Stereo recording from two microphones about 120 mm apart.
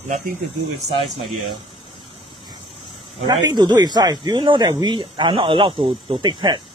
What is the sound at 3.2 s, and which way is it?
Speech, 35° right (ahead or behind).